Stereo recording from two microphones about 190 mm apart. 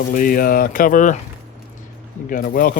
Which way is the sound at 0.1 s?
50° left (ahead or behind).